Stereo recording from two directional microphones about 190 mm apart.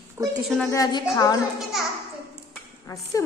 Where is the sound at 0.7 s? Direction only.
20° left (ahead or behind).